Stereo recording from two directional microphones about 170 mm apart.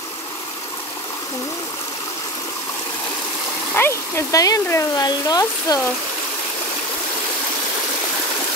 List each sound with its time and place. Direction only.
3.7 s speech: 15° left (ahead or behind)